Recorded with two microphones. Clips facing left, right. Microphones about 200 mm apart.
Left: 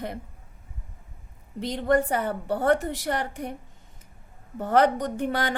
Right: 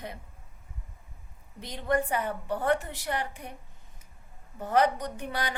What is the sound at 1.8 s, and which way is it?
A woman's voice, 45° left (ahead or behind).